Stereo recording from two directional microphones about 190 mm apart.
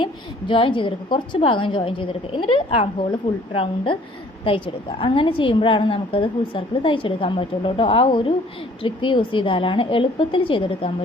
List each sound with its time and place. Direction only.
0.0 s a woman's voice: 25° left (ahead or behind)